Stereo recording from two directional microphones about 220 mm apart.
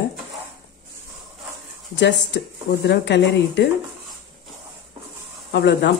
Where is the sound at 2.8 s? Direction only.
50° left (ahead or behind).